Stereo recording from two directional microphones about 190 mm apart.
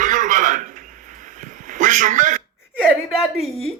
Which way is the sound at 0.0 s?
40° right (ahead or behind).